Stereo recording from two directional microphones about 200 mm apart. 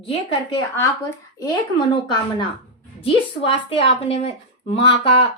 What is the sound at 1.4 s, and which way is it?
Speech, 25° left (ahead or behind).